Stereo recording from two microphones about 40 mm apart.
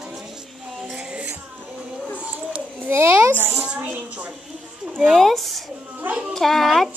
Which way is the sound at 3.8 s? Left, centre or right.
Right.